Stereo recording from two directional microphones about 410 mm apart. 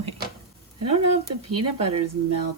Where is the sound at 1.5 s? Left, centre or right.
Right.